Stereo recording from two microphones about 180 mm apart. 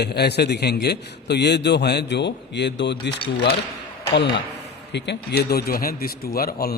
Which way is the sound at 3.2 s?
65° left (ahead or behind).